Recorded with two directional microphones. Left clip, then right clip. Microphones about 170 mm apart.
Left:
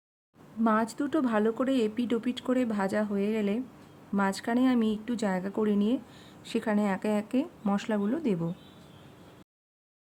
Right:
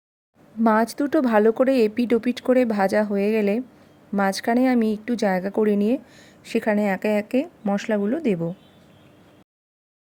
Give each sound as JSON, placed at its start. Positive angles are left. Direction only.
{"t": 0.6, "sound": "a woman's voice", "side_deg": -45}